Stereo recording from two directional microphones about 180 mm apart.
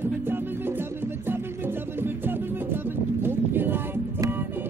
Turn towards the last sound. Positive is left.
turn(degrees=-10)  # may be behind; listen again after turning